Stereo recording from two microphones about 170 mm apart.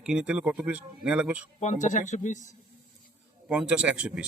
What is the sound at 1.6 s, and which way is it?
Speech, 45° left (ahead or behind).